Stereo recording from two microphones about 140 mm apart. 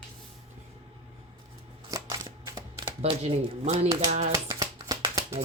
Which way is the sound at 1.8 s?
25° right (ahead or behind).